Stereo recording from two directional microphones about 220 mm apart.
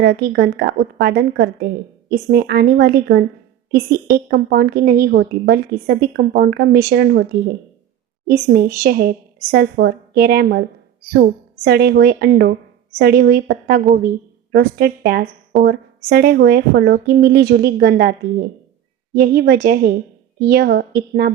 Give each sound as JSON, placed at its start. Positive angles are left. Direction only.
{"t": 0.0, "sound": "a woman's voice", "side_deg": -50}